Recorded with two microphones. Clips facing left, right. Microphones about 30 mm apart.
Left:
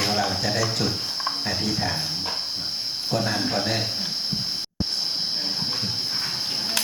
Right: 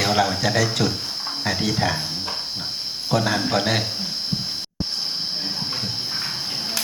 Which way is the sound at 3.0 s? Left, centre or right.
Right.